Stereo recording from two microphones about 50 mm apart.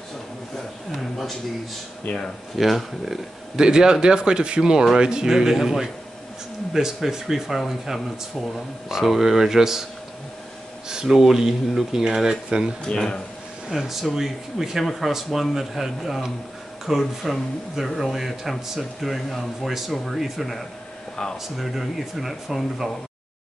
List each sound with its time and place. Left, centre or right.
0.9 s speech: centre
2.0 s speech: left
2.5 s speech: centre
10.9 s speech: centre
12.8 s speech: centre
13.7 s speech: centre
21.2 s speech: centre
21.5 s speech: centre